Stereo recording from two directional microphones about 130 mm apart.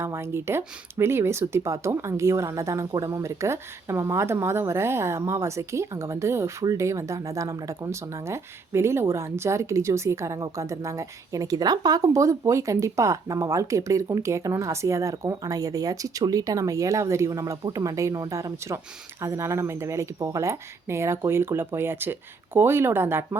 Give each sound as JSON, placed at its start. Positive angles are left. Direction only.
{"t": 0.0, "sound": "speech", "side_deg": -20}